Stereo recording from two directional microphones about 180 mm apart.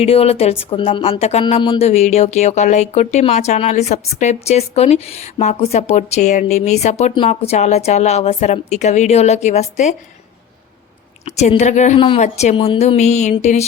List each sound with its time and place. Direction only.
0.0 s speech: 35° left (ahead or behind)
11.3 s speech: 40° left (ahead or behind)
11.9 s speech: 30° left (ahead or behind)